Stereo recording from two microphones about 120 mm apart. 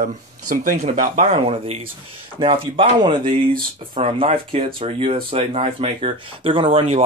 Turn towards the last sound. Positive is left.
turn(degrees=-55)  # may be behind; listen again after turning